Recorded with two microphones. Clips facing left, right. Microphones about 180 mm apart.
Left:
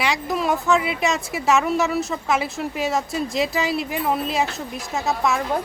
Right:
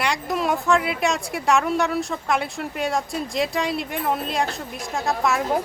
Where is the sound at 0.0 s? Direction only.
Centre (ahead or behind).